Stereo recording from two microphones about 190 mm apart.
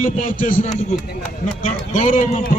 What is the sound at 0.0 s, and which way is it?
Speech, 45° left (ahead or behind).